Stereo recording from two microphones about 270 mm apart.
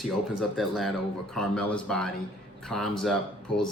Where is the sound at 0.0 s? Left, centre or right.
Centre.